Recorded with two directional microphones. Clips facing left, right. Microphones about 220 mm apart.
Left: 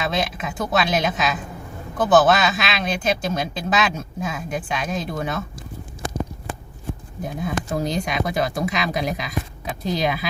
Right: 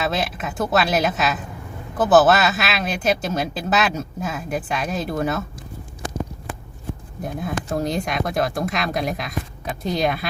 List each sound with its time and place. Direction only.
0.0 s speech: centre (ahead or behind)
7.2 s speech: centre (ahead or behind)